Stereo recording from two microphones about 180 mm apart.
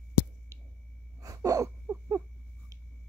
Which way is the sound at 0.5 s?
15° right (ahead or behind).